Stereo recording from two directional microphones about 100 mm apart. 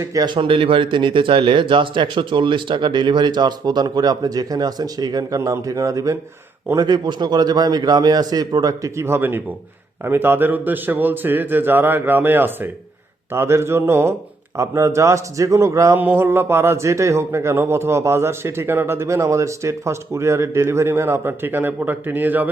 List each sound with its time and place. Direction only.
0.0 s a man's voice: 35° right (ahead or behind)
0.3 s speech: 60° right (ahead or behind); by 6.1 s 35° right (ahead or behind)
6.7 s a man's voice: 45° right (ahead or behind)
16.0 s a man's voice: 20° right (ahead or behind)